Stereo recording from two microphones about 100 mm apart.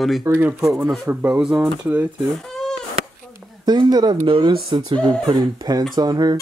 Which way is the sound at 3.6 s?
45° right (ahead or behind).